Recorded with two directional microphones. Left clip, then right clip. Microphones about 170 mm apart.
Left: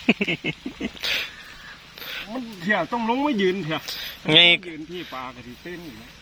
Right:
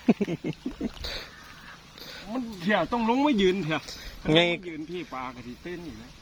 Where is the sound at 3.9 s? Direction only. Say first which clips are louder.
Left 5 dB; 5° right (ahead or behind).